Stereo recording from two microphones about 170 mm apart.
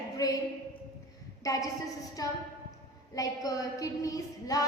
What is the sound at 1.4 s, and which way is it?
A woman's voice, 20° left (ahead or behind).